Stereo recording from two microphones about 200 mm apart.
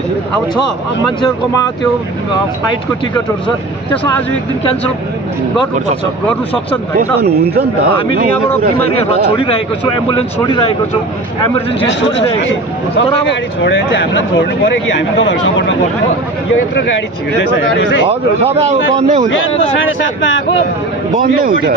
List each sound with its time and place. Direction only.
3.4 s speech: 5° left (ahead or behind)
6.2 s speech: 5° left (ahead or behind)
9.3 s speech: 25° left (ahead or behind)
11.8 s speech: 65° left (ahead or behind)
17.3 s speech: 65° left (ahead or behind)
18.6 s a man's voice: 35° right (ahead or behind)
19.2 s speech: 70° left (ahead or behind)
21.2 s a man's voice: 45° right (ahead or behind)